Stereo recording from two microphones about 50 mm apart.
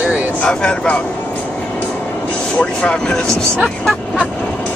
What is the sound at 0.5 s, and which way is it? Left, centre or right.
Speech, centre.